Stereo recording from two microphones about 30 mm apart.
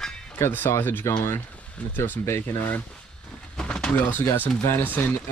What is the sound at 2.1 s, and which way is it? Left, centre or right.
Speech, left.